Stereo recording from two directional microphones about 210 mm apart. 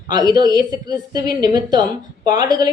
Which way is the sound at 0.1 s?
20° right (ahead or behind).